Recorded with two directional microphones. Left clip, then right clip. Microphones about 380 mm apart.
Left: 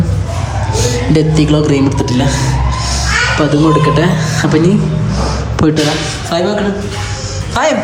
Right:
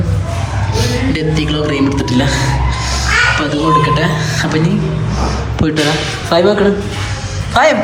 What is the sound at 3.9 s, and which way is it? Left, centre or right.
Speech, left.